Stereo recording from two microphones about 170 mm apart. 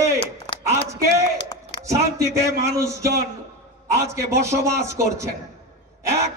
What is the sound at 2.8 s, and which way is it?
A man's voice, 20° right (ahead or behind).